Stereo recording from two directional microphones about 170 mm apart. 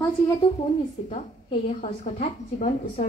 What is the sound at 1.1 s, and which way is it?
A woman's voice, 40° left (ahead or behind).